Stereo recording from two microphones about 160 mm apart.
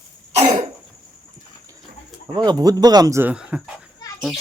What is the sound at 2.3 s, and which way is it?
Speech, 25° right (ahead or behind).